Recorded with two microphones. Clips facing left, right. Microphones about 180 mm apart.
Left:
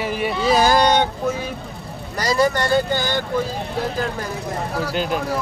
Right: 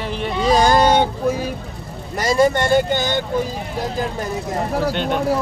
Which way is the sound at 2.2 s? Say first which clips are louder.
Right 3 dB; 25° right (ahead or behind).